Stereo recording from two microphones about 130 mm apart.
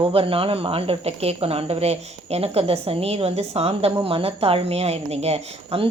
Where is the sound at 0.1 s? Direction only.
45° right (ahead or behind).